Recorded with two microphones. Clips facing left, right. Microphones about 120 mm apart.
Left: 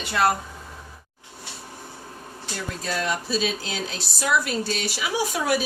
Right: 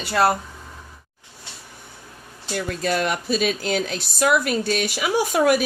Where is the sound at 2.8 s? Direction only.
65° right (ahead or behind).